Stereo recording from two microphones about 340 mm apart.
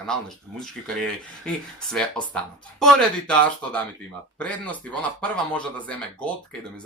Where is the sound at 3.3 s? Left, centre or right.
Centre.